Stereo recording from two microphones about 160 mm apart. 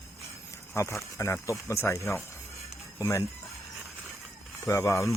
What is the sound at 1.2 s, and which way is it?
Speech, 15° left (ahead or behind).